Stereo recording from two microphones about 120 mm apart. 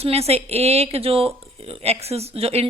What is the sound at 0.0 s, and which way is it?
Speech, 55° right (ahead or behind).